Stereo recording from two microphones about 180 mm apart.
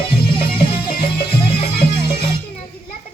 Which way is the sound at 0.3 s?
30° left (ahead or behind).